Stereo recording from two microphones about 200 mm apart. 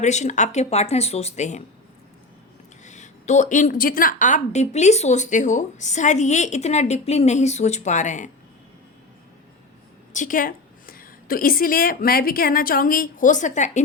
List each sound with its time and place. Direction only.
0.0 s a woman's voice: 35° left (ahead or behind)
2.8 s a woman's voice: 35° left (ahead or behind)
10.1 s a woman's voice: 40° left (ahead or behind)